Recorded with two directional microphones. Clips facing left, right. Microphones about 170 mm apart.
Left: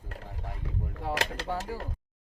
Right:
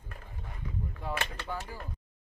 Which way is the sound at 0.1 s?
75° left (ahead or behind).